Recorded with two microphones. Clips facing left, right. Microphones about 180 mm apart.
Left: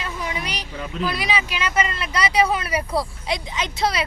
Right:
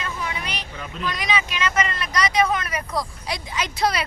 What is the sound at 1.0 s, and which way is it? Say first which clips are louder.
Speech: left 1 dB; 10° left (ahead or behind).